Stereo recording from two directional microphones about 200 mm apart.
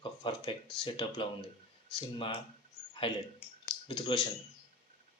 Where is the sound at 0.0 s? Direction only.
25° left (ahead or behind).